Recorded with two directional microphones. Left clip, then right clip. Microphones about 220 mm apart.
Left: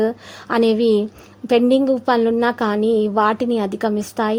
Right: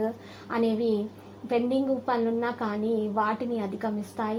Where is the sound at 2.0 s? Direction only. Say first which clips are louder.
Left 10 dB; 40° left (ahead or behind).